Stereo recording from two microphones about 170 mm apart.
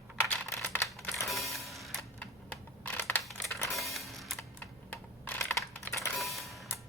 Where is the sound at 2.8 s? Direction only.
10° left (ahead or behind).